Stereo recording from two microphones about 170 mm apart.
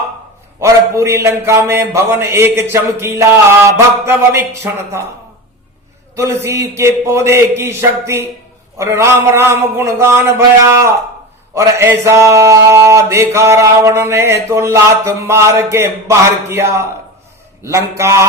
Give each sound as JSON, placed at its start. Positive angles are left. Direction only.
{"t": 0.6, "sound": "mantra", "side_deg": -15}
{"t": 6.1, "sound": "mantra", "side_deg": -15}